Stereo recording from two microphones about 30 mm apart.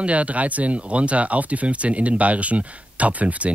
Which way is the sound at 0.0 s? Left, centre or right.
Right.